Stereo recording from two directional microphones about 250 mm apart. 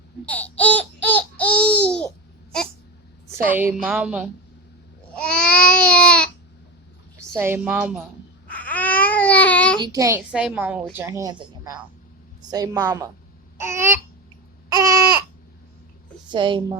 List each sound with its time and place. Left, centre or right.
0.3 s babbling: centre
3.3 s a woman's voice: centre
5.1 s babbling: centre
7.2 s a woman's voice: centre
8.4 s babbling: centre
9.8 s a woman's voice: centre
13.6 s a sound: centre
16.3 s a woman's voice: centre